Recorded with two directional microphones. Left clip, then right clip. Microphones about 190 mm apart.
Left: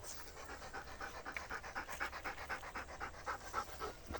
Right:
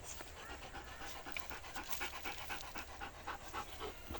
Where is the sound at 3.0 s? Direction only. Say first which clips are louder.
Left 3 dB; 25° left (ahead or behind).